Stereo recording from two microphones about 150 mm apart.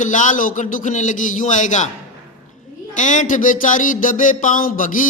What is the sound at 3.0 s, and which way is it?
A man's voice, 55° left (ahead or behind).